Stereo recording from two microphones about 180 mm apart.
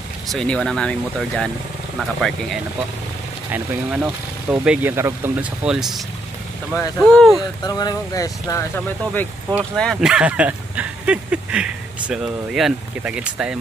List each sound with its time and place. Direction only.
0.3 s speech: 5° left (ahead or behind)
6.7 s speech: 10° left (ahead or behind)
7.6 s speech: 20° left (ahead or behind); by 13.6 s 5° right (ahead or behind)